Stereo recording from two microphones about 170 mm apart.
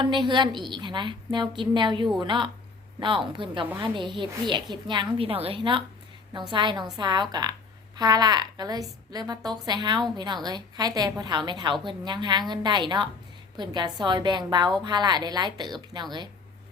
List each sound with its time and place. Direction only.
0.0 s a woman's voice: 25° right (ahead or behind)